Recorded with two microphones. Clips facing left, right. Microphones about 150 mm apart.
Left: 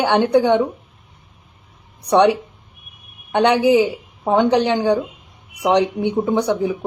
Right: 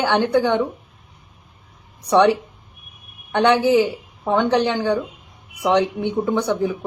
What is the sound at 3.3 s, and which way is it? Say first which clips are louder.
Speech: left 1 dB; 15° left (ahead or behind).